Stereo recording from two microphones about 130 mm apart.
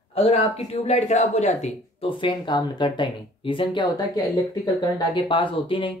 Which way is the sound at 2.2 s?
35° left (ahead or behind).